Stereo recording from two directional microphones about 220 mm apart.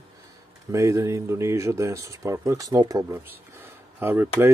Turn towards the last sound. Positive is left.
turn(degrees=-10)  # may be behind; listen again after turning